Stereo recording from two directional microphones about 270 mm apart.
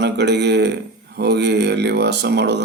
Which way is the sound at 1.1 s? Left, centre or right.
Right.